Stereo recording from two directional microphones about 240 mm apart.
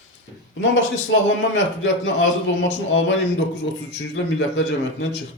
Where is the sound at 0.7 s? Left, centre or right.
Left.